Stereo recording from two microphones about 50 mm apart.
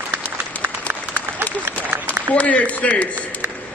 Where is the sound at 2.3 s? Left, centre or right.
Left.